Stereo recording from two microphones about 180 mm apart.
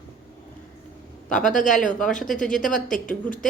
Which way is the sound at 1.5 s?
45° left (ahead or behind).